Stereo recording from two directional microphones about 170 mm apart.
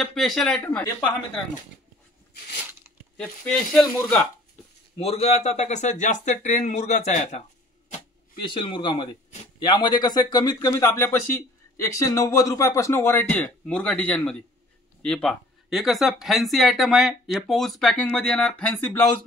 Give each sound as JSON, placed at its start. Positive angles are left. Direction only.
{"t": 0.0, "sound": "speech", "side_deg": 0}
{"t": 3.2, "sound": "speech", "side_deg": 5}
{"t": 4.9, "sound": "speech", "side_deg": 35}
{"t": 8.5, "sound": "speech", "side_deg": 30}